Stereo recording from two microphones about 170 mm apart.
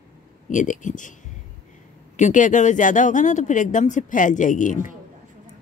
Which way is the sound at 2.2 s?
50° left (ahead or behind).